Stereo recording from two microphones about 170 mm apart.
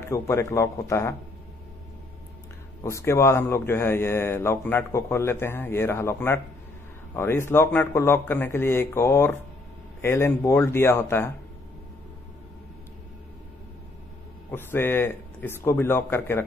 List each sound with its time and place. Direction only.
0.1 s speech: 15° left (ahead or behind)
2.8 s speech: 15° left (ahead or behind)
14.5 s speech: 15° left (ahead or behind)